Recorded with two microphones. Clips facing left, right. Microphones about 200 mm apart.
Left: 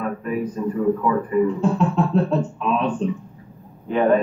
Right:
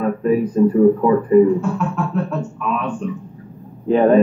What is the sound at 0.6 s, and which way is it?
Speech, 35° right (ahead or behind).